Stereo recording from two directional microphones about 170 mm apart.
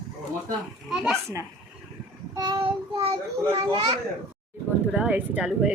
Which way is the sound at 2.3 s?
25° right (ahead or behind).